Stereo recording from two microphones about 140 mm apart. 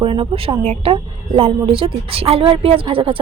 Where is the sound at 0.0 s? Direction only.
40° right (ahead or behind).